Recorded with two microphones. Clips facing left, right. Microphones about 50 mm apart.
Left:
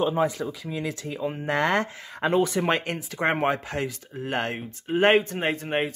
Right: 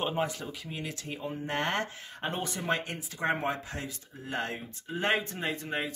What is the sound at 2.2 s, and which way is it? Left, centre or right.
Speech, left.